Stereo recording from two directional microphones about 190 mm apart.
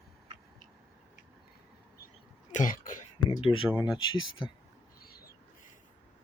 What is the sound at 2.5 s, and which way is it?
Throat clearing, 40° left (ahead or behind).